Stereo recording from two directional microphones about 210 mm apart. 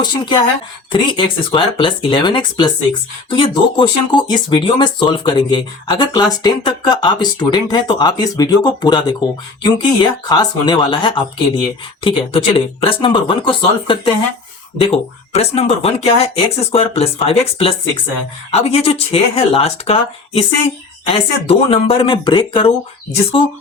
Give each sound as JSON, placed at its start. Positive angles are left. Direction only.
{"t": 0.0, "sound": "speech", "side_deg": 20}
{"t": 10.2, "sound": "speech", "side_deg": 20}